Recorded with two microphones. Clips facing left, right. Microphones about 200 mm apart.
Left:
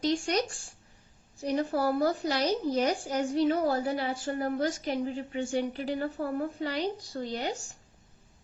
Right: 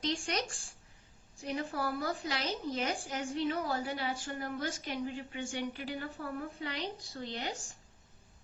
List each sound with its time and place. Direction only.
0.1 s speech: 40° left (ahead or behind)
1.4 s speech: 40° left (ahead or behind)